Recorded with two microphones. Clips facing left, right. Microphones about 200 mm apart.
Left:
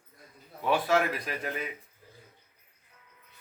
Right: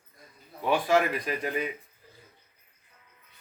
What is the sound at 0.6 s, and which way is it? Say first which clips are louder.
Speech: right 2 dB; centre (ahead or behind).